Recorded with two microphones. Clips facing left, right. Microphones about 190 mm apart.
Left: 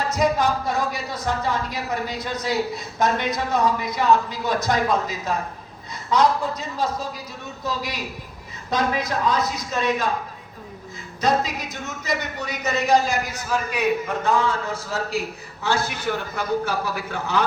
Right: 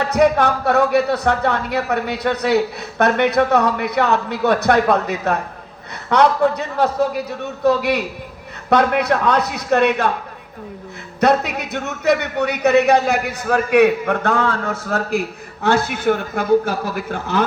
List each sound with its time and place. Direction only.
0.0 s a man's voice: 65° right (ahead or behind)
11.2 s a man's voice: 65° right (ahead or behind)